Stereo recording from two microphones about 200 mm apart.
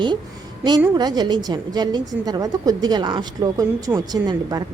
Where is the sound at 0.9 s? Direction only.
20° right (ahead or behind).